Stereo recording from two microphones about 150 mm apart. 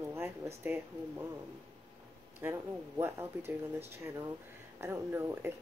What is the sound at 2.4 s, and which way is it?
Speech, 15° right (ahead or behind).